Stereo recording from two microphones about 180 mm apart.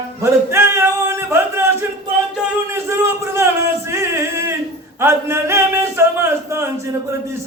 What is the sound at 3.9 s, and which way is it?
Music, 15° right (ahead or behind).